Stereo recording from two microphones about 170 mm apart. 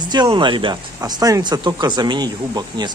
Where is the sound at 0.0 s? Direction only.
25° right (ahead or behind).